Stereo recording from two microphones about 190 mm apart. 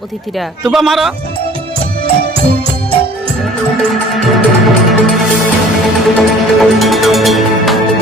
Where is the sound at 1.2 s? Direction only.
30° right (ahead or behind).